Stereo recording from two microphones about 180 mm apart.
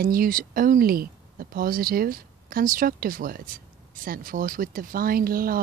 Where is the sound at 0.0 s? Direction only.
50° right (ahead or behind).